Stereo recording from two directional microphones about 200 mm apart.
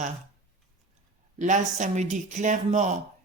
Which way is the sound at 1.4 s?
35° right (ahead or behind).